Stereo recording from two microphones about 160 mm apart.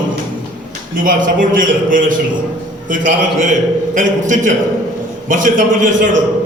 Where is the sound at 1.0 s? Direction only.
55° right (ahead or behind).